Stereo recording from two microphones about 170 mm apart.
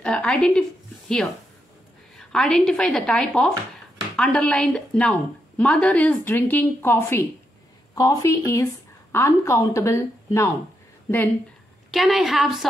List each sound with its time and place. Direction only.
0.0 s a woman's voice: 5° left (ahead or behind)
11.9 s speech: centre (ahead or behind)